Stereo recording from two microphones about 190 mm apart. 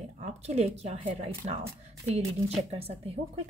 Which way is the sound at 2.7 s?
30° right (ahead or behind).